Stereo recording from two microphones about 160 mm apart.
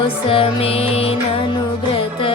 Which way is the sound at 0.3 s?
35° left (ahead or behind).